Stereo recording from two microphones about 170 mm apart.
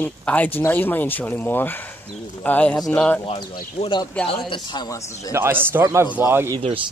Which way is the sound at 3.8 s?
25° left (ahead or behind).